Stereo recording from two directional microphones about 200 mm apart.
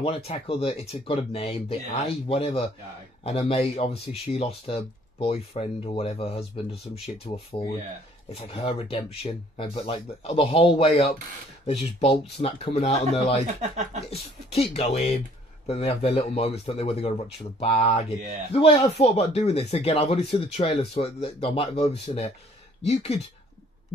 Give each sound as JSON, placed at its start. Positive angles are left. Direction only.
{"t": 0.0, "sound": "speech", "side_deg": 30}